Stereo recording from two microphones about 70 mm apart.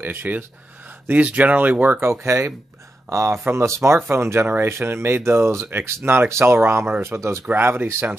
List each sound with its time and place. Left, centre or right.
0.0 s speech: right
2.0 s speech: right
7.5 s speech: right